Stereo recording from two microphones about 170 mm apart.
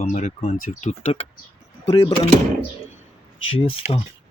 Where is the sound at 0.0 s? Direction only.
40° left (ahead or behind).